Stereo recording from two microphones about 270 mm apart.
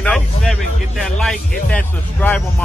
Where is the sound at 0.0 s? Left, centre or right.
Centre.